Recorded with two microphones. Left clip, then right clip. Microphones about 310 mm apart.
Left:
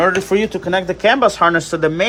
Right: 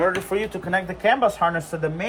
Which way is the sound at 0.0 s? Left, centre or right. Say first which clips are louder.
Left 7 dB; left.